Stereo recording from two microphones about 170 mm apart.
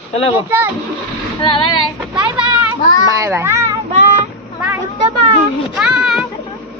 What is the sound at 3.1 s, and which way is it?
Speech, 20° right (ahead or behind).